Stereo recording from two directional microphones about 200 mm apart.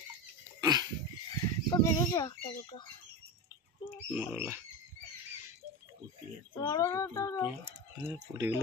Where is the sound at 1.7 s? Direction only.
20° left (ahead or behind).